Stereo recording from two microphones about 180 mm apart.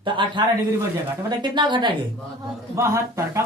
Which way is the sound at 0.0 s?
25° right (ahead or behind).